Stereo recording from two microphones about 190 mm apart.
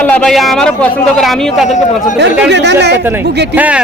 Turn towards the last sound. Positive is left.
turn(degrees=-10)  # may be behind; listen again after turning